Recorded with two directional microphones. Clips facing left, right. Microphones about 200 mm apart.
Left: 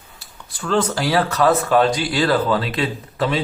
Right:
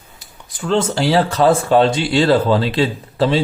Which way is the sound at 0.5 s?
20° right (ahead or behind).